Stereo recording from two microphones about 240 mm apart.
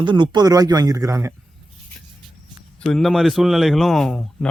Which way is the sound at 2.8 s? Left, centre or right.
Centre.